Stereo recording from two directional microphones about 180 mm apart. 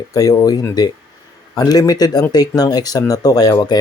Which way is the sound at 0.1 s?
20° left (ahead or behind).